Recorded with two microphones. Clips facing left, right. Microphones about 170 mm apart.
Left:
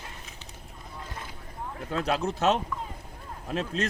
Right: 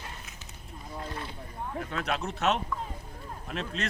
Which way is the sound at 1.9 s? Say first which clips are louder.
Left 7 dB; 35° left (ahead or behind).